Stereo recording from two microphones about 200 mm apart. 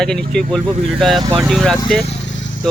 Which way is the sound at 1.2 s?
20° right (ahead or behind).